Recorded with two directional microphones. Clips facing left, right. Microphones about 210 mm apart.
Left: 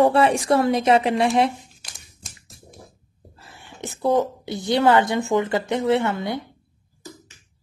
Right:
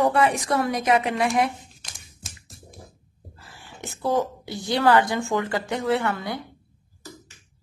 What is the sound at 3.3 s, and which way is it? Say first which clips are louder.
A woman's voice: left 1 dB; 25° left (ahead or behind).